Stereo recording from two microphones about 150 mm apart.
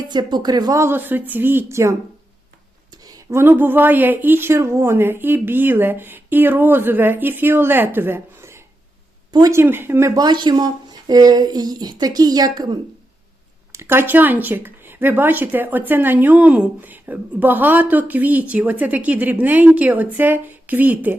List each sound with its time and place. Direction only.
0.0 s speech: 30° right (ahead or behind)
13.7 s speech: 15° right (ahead or behind)